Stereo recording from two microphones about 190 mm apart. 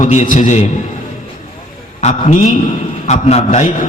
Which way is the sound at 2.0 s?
35° left (ahead or behind).